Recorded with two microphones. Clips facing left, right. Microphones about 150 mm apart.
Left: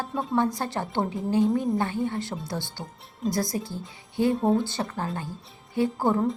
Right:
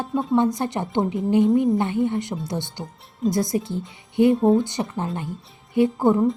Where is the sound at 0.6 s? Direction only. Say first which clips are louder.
Right 4 dB; 20° right (ahead or behind).